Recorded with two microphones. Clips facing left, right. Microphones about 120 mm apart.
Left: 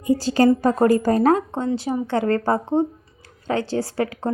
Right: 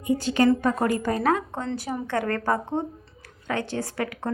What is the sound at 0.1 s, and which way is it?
A woman's voice, 35° left (ahead or behind).